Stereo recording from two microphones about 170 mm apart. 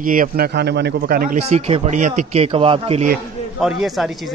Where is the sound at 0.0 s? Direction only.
55° right (ahead or behind).